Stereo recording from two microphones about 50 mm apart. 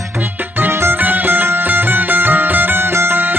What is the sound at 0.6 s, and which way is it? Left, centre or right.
Music, right.